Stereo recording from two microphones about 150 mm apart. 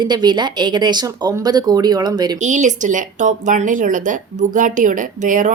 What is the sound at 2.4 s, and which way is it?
Speech, 55° right (ahead or behind).